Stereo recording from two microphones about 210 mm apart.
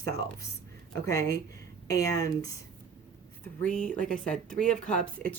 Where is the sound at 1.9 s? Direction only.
15° left (ahead or behind).